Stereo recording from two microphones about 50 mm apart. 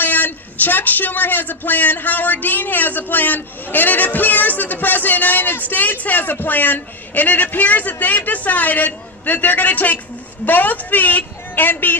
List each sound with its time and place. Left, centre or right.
0.0 s a man's voice: left